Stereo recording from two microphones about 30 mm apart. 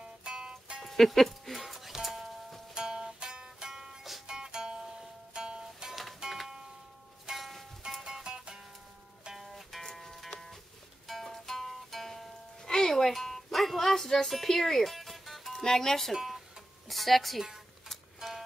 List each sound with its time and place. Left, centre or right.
0.0 s music: right
0.8 s music: centre
1.6 s music: centre
2.7 s music: right
7.3 s music: centre
8.0 s music: right
9.5 s music: centre
12.6 s music: centre
15.6 s speech: centre
16.2 s a sound: centre
18.2 s music: centre